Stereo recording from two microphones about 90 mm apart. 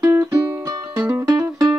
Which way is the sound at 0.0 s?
40° right (ahead or behind).